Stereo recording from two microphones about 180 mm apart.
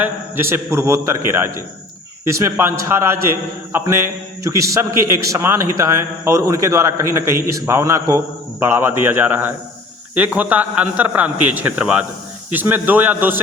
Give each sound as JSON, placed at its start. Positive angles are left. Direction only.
{"t": 0.0, "sound": "a man's voice", "side_deg": -10}